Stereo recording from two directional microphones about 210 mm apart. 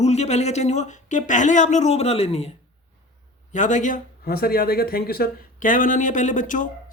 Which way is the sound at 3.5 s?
35° left (ahead or behind).